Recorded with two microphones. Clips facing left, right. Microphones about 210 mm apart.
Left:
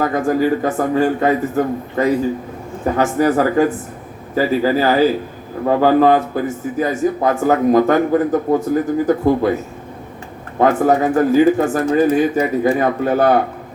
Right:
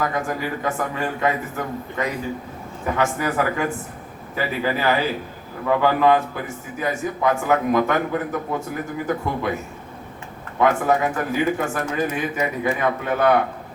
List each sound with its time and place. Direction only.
0.0 s a man's voice: 40° left (ahead or behind)
10.6 s a man's voice: 40° left (ahead or behind)